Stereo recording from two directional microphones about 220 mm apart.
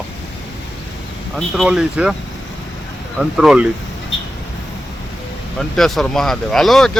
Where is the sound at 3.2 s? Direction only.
Centre (ahead or behind).